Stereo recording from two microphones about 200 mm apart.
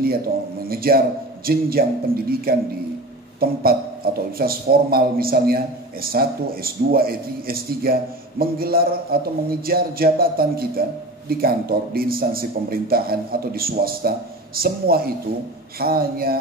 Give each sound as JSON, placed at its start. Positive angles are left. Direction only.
{"t": 0.7, "sound": "a man's voice", "side_deg": -50}